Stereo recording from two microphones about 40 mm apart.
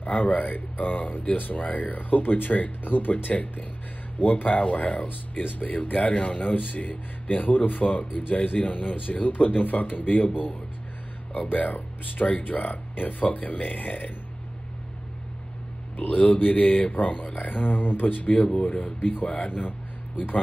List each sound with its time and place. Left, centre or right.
0.0 s speech: left
16.0 s a man's voice: left
18.2 s a man's voice: left
18.5 s speech: left
18.9 s speech: left
19.2 s a man's voice: left